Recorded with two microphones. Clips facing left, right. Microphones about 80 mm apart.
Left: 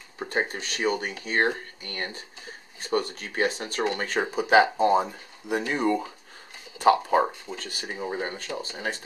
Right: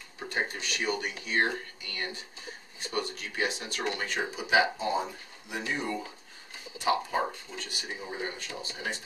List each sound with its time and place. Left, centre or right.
0.2 s speech: left